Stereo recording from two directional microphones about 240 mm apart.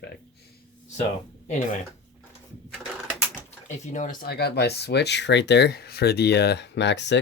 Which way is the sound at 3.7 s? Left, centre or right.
Left.